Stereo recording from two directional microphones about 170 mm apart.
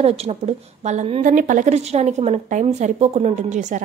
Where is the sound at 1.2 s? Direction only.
50° right (ahead or behind).